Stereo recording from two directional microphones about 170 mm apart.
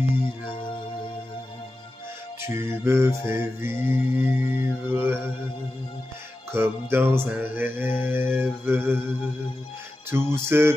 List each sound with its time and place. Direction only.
2.4 s music: 15° right (ahead or behind)
6.5 s music: 15° right (ahead or behind)
10.1 s music: 15° right (ahead or behind)